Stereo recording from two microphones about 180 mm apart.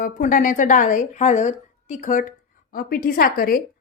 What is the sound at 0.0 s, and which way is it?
A woman's voice, 45° left (ahead or behind).